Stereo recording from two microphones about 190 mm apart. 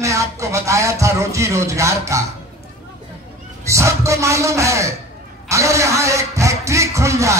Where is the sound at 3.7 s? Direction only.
15° right (ahead or behind).